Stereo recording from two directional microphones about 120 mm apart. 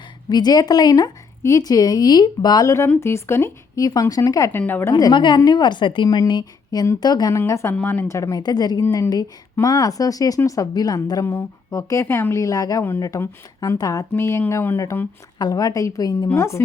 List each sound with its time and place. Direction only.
0.3 s a woman's voice: 35° left (ahead or behind); by 4.9 s 20° left (ahead or behind)
4.9 s speech: 35° left (ahead or behind)
15.4 s speech: 30° left (ahead or behind)